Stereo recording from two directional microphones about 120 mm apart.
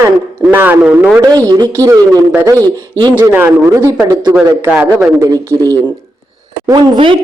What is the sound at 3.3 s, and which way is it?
A man's voice, 20° right (ahead or behind).